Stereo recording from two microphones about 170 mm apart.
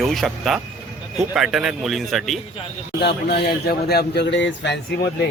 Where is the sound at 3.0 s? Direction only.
75° left (ahead or behind); by 5.1 s 90° left.